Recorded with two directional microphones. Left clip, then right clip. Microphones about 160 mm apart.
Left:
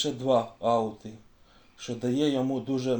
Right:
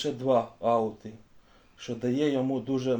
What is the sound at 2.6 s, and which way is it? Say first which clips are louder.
Speech: even; 20° right (ahead or behind).